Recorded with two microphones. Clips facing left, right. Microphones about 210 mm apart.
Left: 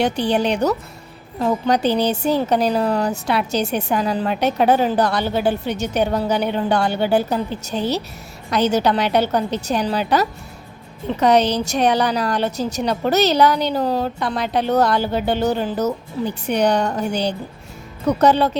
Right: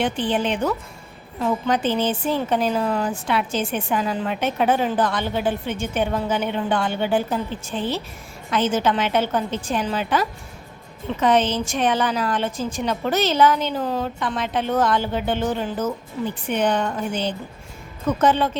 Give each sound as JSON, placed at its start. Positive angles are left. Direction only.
{"t": 0.0, "sound": "a woman's voice", "side_deg": 40}